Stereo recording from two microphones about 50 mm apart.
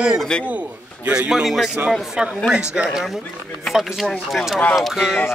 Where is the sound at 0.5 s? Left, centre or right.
Right.